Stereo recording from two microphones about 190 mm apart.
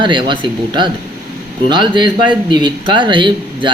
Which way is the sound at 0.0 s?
25° right (ahead or behind).